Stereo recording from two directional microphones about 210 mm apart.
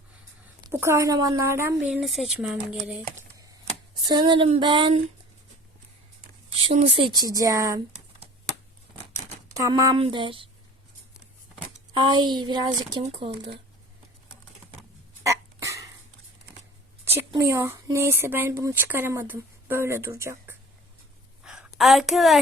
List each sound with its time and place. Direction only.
0.6 s speech: 10° right (ahead or behind)
3.2 s typewriter: 15° right (ahead or behind)
4.0 s speech: 20° right (ahead or behind)
6.5 s speech: 25° right (ahead or behind)
9.5 s speech: 15° right (ahead or behind)
11.9 s speech: 20° right (ahead or behind)
15.2 s cough: 15° right (ahead or behind)
17.1 s speech: 15° right (ahead or behind)
21.4 s a sound: 5° right (ahead or behind)